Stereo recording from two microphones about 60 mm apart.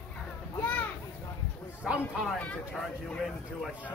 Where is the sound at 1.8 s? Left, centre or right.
Centre.